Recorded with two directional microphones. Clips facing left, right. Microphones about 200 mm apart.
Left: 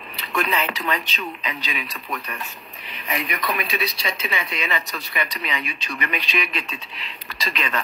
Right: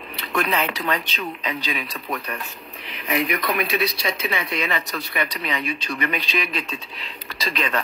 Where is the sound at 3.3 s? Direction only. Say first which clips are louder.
Right 3 dB; 60° right (ahead or behind).